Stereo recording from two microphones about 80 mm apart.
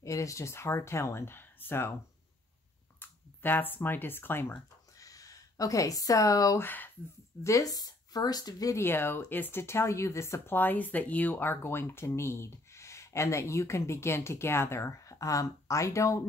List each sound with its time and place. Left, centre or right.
0.0 s speech: left
3.0 s speech: left
4.9 s a sound: left
6.6 s speech: left
7.4 s speech: left
8.7 s speech: left
10.5 s speech: left